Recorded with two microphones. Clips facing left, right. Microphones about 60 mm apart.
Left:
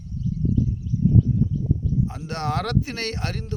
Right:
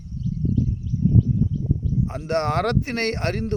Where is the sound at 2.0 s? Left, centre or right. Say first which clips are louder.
Right 5 dB; right.